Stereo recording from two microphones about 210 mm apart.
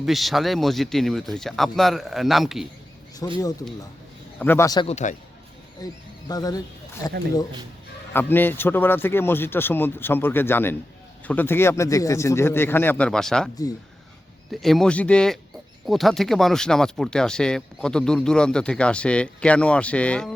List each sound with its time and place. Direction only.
0.0 s speech: centre (ahead or behind)
3.2 s a man's voice: 15° left (ahead or behind)
4.9 s a man's voice: 35° left (ahead or behind)
5.8 s speech: 20° left (ahead or behind)
8.1 s a man's voice: 10° left (ahead or behind)
14.5 s speech: centre (ahead or behind)